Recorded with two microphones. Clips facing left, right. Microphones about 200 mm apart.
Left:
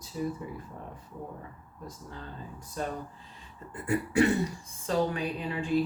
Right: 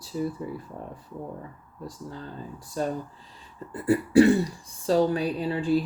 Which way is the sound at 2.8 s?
35° right (ahead or behind).